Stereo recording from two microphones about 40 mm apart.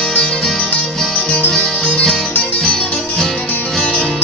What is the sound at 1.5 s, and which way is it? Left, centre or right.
Music, left.